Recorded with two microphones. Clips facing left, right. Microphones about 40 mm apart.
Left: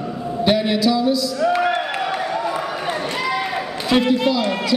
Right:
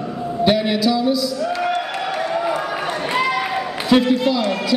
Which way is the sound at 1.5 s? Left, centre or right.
Left.